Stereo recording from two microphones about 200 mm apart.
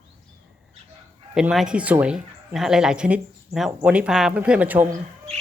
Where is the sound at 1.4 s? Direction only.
5° right (ahead or behind).